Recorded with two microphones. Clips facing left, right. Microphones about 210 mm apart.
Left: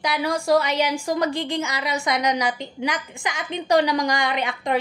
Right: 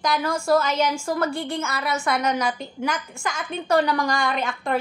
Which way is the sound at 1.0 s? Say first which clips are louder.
Left 1 dB; 15° left (ahead or behind).